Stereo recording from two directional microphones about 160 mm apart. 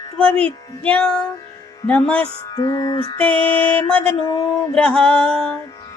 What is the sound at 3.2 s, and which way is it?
Music, 10° left (ahead or behind).